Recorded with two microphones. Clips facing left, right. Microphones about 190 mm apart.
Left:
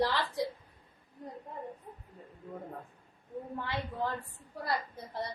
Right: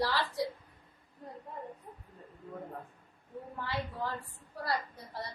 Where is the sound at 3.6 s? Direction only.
20° left (ahead or behind).